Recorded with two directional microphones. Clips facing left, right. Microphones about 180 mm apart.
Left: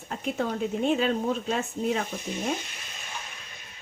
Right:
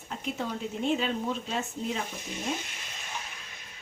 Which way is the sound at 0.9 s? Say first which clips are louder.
Left 4 dB; 45° left (ahead or behind).